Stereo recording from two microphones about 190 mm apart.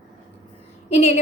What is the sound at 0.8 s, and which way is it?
Speech, 35° left (ahead or behind).